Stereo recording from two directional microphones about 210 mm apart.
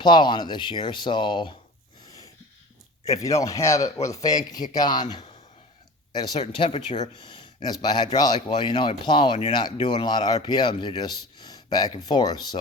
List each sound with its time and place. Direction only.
0.0 s a man's voice: 20° left (ahead or behind)
2.0 s a sound: 15° left (ahead or behind)
3.0 s a man's voice: 15° left (ahead or behind); by 7.1 s 30° left (ahead or behind)
7.2 s a man's voice: 20° left (ahead or behind)